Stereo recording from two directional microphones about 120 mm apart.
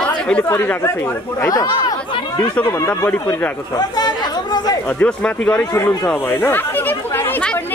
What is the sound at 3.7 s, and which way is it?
Chatter, 35° left (ahead or behind).